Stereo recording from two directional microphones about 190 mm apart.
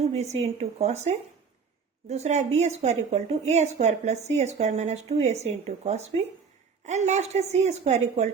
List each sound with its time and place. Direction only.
0.0 s speech: 35° right (ahead or behind)